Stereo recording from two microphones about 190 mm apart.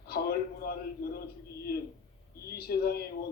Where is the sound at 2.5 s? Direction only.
55° left (ahead or behind).